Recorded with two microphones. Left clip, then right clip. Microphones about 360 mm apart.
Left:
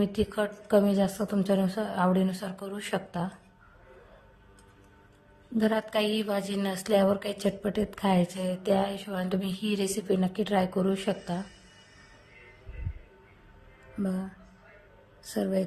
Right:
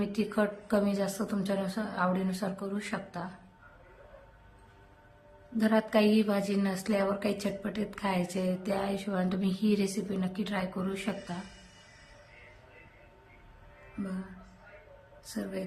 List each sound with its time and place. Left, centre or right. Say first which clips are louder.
0.0 s speech: left 2 dB; centre
5.5 s speech: even; centre
15.2 s speech: left 9 dB; centre